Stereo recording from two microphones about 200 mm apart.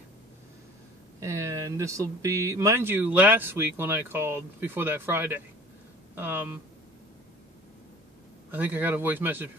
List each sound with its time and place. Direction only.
1.2 s speech: 15° right (ahead or behind)
8.5 s speech: 10° right (ahead or behind)